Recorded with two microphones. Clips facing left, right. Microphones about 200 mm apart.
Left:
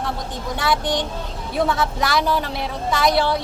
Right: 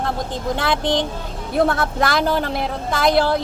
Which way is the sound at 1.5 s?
55° right (ahead or behind).